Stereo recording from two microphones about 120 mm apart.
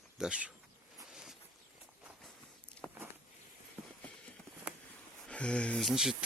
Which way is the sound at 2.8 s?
15° left (ahead or behind).